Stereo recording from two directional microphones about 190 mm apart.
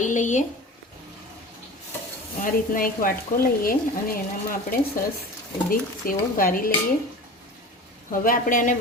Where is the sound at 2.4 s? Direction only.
45° left (ahead or behind).